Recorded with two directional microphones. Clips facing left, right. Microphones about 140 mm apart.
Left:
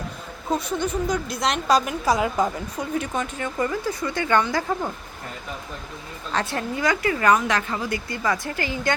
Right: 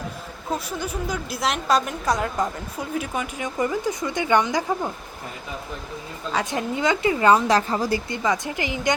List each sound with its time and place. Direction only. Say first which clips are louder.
0.5 s a woman's voice: left 4 dB; 5° right (ahead or behind)
6.3 s a woman's voice: right 1 dB; 15° right (ahead or behind); by 8.2 s 30° right (ahead or behind)
8.2 s a woman's voice: right 1 dB; 20° right (ahead or behind)